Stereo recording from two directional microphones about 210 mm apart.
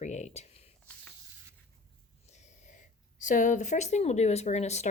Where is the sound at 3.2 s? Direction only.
35° left (ahead or behind).